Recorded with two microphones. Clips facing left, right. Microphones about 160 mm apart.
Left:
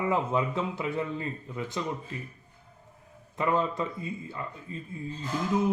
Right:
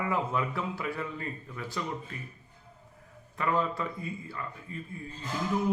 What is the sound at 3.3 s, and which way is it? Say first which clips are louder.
Speech: left 2 dB; 20° left (ahead or behind).